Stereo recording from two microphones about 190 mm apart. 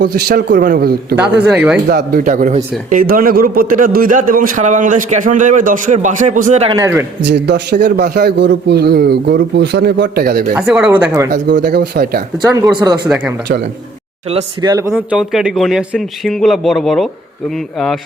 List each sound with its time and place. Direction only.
0.0 s a man's voice: 55° right (ahead or behind)
1.5 s speech: 5° right (ahead or behind)
1.9 s a man's voice: 50° right (ahead or behind); by 6.7 s 35° right (ahead or behind)
6.7 s a man's voice: 15° right (ahead or behind)
7.2 s a man's voice: 65° right (ahead or behind)
10.5 s speech: 5° right (ahead or behind)
11.3 s a man's voice: 60° right (ahead or behind)
12.7 s speech: 20° right (ahead or behind)
13.1 s speech: 5° right (ahead or behind)
14.3 s speech: 25° right (ahead or behind); by 17.1 s centre (ahead or behind)